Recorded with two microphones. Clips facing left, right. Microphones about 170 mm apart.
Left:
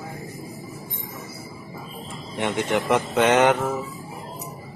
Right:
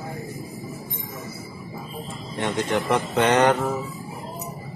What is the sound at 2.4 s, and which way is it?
A man's voice, 15° left (ahead or behind).